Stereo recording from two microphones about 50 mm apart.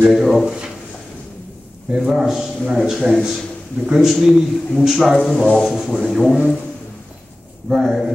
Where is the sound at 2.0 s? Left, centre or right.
Centre.